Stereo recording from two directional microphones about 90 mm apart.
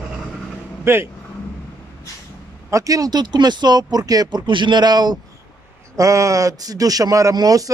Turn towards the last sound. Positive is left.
turn(degrees=-40)  # may be behind; listen again after turning